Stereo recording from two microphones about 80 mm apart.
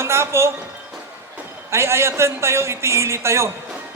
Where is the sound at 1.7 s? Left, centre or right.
Right.